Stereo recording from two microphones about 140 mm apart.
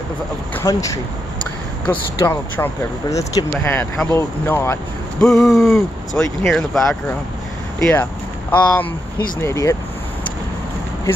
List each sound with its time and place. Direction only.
0.6 s speech: 25° left (ahead or behind)
2.1 s speech: 20° left (ahead or behind)
3.5 s speech: 10° left (ahead or behind)
5.2 s speech: centre (ahead or behind); by 9.8 s 20° left (ahead or behind)